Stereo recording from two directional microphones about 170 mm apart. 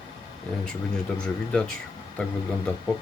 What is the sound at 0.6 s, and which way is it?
Speech, 5° left (ahead or behind).